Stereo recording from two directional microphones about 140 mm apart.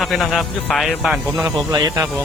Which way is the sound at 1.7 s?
25° right (ahead or behind).